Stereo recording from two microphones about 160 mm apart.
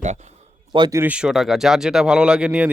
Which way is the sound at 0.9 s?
10° right (ahead or behind).